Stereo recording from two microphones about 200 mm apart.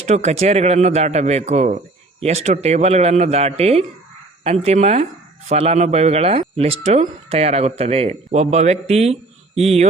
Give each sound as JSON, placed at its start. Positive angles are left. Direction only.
{"t": 0.0, "sound": "speech", "side_deg": -35}